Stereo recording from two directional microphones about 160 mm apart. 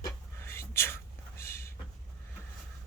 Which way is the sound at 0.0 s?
15° left (ahead or behind).